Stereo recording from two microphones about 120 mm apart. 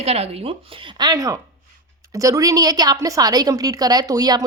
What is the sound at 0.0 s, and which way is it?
Speech, 60° right (ahead or behind).